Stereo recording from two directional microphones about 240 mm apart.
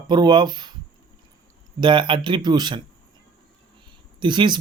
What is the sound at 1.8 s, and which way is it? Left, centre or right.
Speech, centre.